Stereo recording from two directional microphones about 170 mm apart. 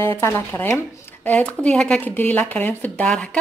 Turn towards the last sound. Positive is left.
turn(degrees=5)  # may be behind; listen again after turning